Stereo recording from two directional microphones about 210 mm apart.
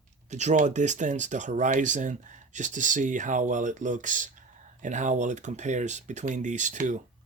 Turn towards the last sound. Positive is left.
turn(degrees=-35)  # may be behind; listen again after turning